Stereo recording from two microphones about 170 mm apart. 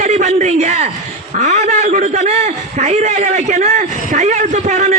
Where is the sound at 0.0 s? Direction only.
40° right (ahead or behind).